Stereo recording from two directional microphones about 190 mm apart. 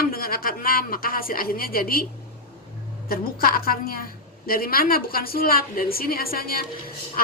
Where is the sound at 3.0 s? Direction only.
50° left (ahead or behind).